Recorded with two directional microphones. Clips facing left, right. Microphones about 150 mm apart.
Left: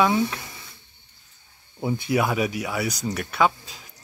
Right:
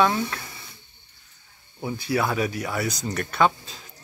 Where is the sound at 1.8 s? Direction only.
20° left (ahead or behind).